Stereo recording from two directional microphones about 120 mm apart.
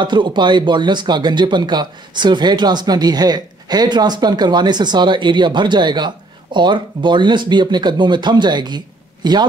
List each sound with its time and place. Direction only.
0.0 s speech: 40° right (ahead or behind)